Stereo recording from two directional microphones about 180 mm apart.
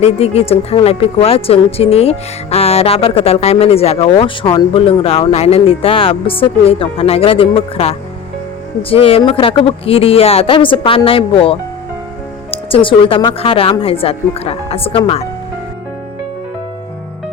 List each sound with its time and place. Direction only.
0.0 s speech: 35° left (ahead or behind)